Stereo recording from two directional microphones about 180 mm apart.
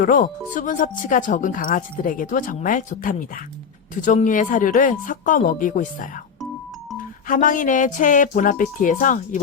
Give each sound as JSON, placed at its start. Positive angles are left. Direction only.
{"t": 0.0, "sound": "speech", "side_deg": 50}
{"t": 7.3, "sound": "speech", "side_deg": 45}